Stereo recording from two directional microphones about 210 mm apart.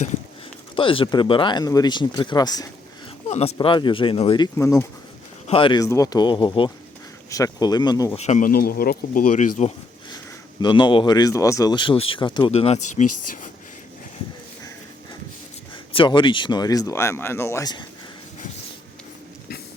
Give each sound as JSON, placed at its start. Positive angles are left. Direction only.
{"t": 0.8, "sound": "speech", "side_deg": 25}
{"t": 3.2, "sound": "speech", "side_deg": 30}
{"t": 4.5, "sound": "speech", "side_deg": 15}
{"t": 5.5, "sound": "speech", "side_deg": 25}
{"t": 8.1, "sound": "speech", "side_deg": 30}
{"t": 10.6, "sound": "speech", "side_deg": 20}
{"t": 15.7, "sound": "speech", "side_deg": 25}